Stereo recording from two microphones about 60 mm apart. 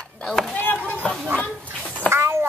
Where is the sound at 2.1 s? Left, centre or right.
Right.